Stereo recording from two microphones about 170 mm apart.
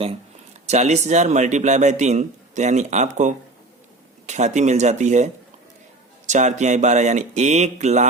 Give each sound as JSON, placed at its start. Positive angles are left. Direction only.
{"t": 0.7, "sound": "a man's voice", "side_deg": -40}